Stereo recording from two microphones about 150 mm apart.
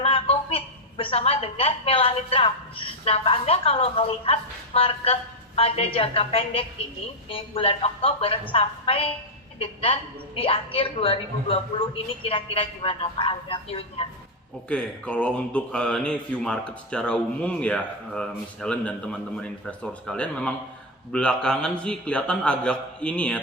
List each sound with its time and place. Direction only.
0.0 s a woman's voice: 40° left (ahead or behind)
14.7 s speech: 10° left (ahead or behind)